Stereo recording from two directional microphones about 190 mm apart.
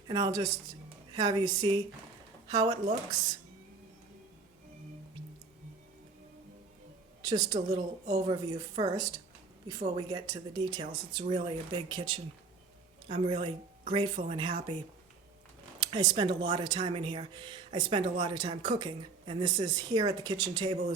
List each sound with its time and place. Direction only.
0.1 s speech: 20° right (ahead or behind)
7.2 s a woman's voice: 20° right (ahead or behind)
15.8 s speech: 25° right (ahead or behind)